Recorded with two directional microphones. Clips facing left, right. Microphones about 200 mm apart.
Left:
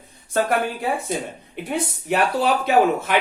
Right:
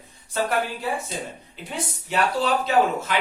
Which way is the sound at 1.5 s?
60° left (ahead or behind).